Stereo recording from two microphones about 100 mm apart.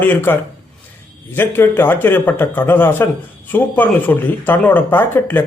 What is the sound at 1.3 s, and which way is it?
Speech, 20° left (ahead or behind).